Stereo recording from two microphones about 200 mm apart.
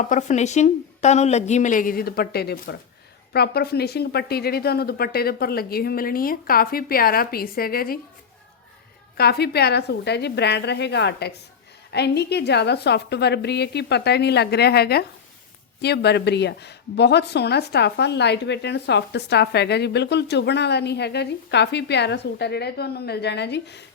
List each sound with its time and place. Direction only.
0.0 s a woman's voice: 35° left (ahead or behind)
9.1 s a woman's voice: 50° left (ahead or behind)